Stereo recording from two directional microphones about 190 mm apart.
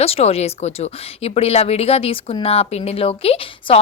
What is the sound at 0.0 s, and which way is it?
A woman's voice, 30° left (ahead or behind).